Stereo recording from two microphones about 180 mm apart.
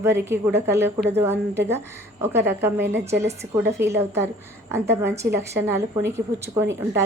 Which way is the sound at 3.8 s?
10° right (ahead or behind).